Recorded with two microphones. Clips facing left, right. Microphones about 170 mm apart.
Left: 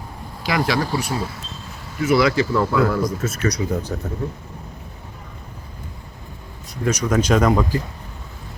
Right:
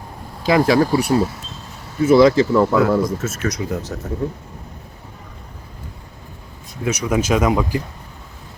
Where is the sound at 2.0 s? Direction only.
25° right (ahead or behind).